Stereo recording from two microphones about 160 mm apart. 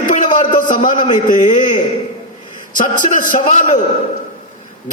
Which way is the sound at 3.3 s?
50° left (ahead or behind).